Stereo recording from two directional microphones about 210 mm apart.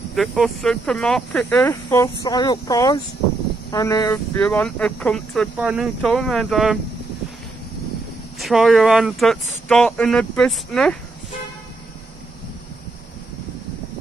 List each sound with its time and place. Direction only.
0.1 s speech: centre (ahead or behind)
8.4 s speech: centre (ahead or behind)